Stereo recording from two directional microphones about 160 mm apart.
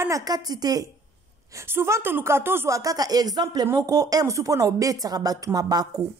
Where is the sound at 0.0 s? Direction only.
20° right (ahead or behind).